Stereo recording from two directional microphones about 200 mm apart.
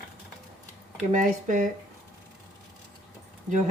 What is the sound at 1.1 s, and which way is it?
Speech, 40° right (ahead or behind).